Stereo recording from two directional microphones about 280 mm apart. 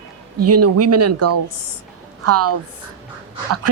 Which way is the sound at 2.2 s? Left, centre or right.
Right.